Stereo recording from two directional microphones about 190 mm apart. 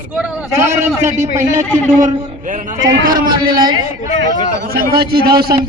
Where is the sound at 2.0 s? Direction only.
40° right (ahead or behind).